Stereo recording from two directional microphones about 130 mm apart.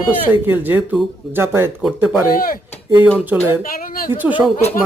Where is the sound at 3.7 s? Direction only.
90° left.